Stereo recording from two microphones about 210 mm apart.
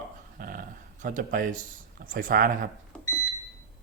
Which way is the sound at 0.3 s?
40° right (ahead or behind).